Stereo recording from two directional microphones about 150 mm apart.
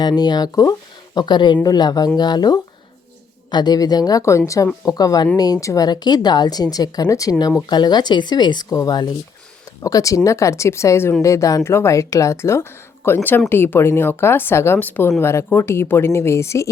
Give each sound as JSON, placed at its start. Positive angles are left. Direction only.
{"t": 0.0, "sound": "speech", "side_deg": 30}